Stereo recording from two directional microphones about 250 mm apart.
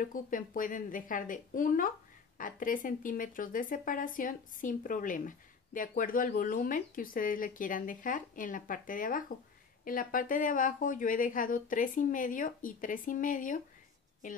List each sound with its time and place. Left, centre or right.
0.0 s speech: left